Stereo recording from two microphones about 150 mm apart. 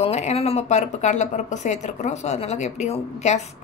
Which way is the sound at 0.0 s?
45° left (ahead or behind).